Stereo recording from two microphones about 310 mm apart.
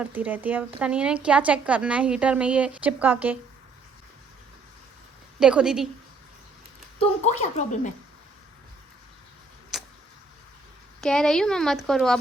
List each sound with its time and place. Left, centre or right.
0.0 s a woman's voice: centre
5.4 s a woman's voice: centre
7.0 s a woman's voice: left
9.7 s vehicle: centre
11.0 s a woman's voice: centre